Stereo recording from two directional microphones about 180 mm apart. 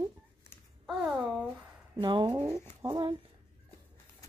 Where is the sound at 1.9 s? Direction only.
25° right (ahead or behind).